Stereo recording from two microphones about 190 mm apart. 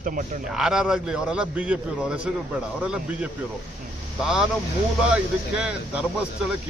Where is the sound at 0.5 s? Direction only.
5° right (ahead or behind).